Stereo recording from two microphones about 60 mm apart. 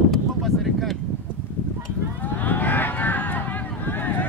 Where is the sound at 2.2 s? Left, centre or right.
Left.